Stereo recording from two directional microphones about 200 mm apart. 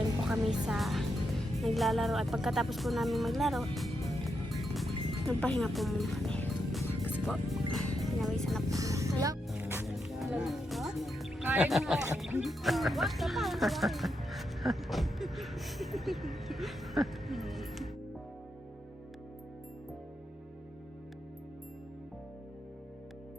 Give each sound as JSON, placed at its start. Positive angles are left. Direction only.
{"t": 0.3, "sound": "speech", "side_deg": 0}
{"t": 4.5, "sound": "music", "side_deg": 0}
{"t": 8.7, "sound": "music", "side_deg": -15}
{"t": 11.4, "sound": "speech", "side_deg": -5}